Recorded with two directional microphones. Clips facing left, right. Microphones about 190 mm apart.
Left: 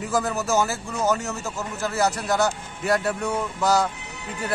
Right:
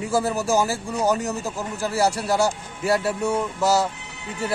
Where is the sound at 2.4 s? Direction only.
5° right (ahead or behind).